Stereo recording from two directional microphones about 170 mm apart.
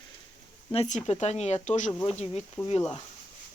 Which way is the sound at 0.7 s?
40° left (ahead or behind).